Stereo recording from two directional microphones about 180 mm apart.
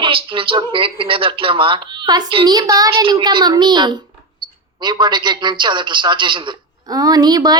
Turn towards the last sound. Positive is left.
turn(degrees=-20)  # may be behind; listen again after turning